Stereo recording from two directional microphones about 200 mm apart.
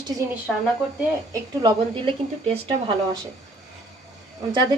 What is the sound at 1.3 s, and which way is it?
A woman's voice, 25° right (ahead or behind).